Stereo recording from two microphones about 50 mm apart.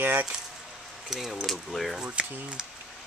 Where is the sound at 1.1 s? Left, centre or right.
Centre.